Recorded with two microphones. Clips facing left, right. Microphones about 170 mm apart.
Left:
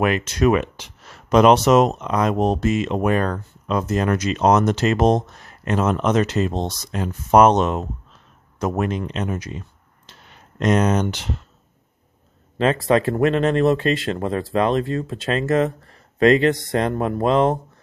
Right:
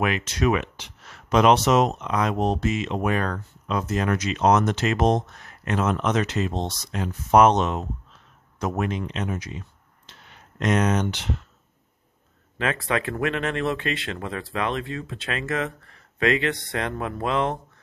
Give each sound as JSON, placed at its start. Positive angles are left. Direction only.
{"t": 0.0, "sound": "speech", "side_deg": 45}
{"t": 12.5, "sound": "speech", "side_deg": 35}